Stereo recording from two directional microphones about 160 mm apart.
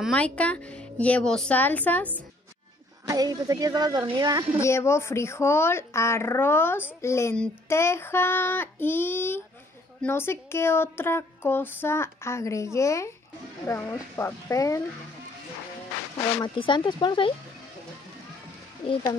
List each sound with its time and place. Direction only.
0.0 s speech: 5° left (ahead or behind)
3.1 s speech: 25° right (ahead or behind)
4.6 s speech: 15° left (ahead or behind)
7.3 s speech: 5° left (ahead or behind)
16.5 s speech: 30° left (ahead or behind)